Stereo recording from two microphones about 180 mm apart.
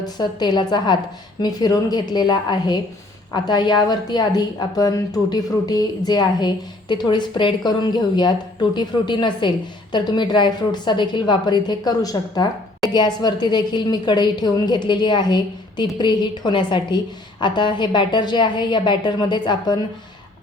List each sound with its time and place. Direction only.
0.0 s a woman's voice: 25° left (ahead or behind)